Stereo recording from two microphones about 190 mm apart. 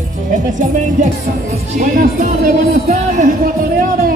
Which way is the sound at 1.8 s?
45° right (ahead or behind).